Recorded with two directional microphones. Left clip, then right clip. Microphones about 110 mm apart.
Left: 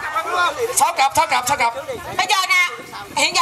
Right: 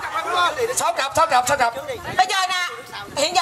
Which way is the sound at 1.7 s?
20° right (ahead or behind).